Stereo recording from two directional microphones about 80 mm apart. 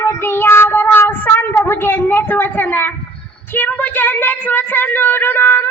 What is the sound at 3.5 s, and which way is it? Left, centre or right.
Speech, left.